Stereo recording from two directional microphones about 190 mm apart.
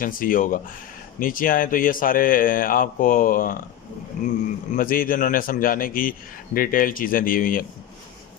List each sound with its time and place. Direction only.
0.0 s a man's voice: 45° left (ahead or behind)
4.7 s a man's voice: 45° left (ahead or behind)